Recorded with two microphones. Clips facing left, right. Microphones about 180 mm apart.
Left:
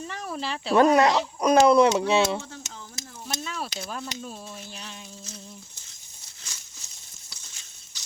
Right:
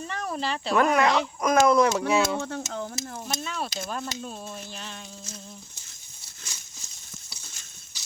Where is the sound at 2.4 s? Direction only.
70° right (ahead or behind).